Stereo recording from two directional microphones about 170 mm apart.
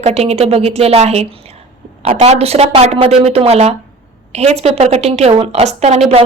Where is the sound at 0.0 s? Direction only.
40° right (ahead or behind).